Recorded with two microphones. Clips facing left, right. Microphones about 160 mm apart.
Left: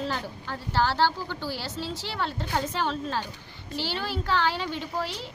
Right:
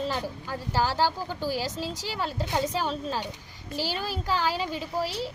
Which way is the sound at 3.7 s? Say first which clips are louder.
Even; 40° right (ahead or behind).